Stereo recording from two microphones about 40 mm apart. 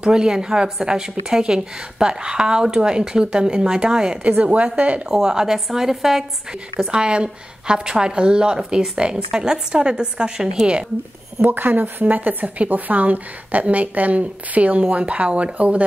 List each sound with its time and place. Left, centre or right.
0.0 s a woman's voice: centre
4.2 s a woman's voice: right
5.0 s a woman's voice: centre
6.9 s a woman's voice: right
11.4 s a woman's voice: right